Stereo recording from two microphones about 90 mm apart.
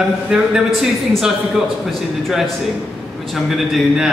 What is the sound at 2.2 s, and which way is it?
Speech, centre (ahead or behind).